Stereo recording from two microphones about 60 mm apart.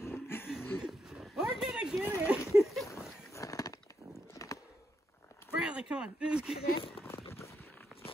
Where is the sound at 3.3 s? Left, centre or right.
Left.